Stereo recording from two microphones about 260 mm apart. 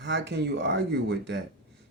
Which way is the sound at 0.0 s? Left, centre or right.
Right.